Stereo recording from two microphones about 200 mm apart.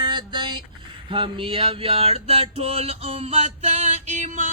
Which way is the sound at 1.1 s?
25° right (ahead or behind).